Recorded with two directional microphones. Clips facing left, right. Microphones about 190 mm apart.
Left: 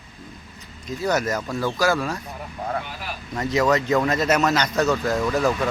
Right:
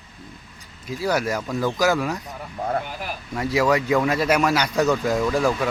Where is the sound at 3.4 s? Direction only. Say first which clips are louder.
Even; 10° right (ahead or behind).